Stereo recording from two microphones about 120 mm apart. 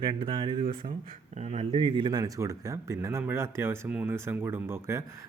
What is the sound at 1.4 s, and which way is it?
Speech, 70° right (ahead or behind).